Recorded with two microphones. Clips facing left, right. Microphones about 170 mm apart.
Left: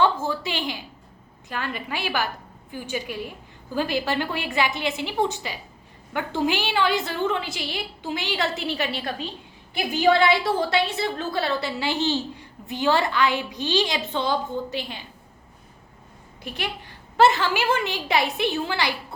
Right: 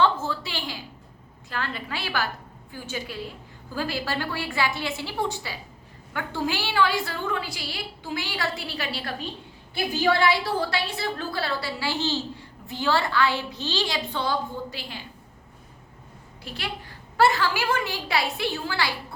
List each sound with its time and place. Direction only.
0.0 s a sound: 15° left (ahead or behind)
1.5 s a woman's voice: 15° left (ahead or behind)
16.5 s a woman's voice: 20° left (ahead or behind)